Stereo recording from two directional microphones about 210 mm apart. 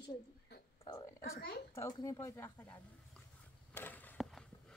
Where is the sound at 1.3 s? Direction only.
50° left (ahead or behind).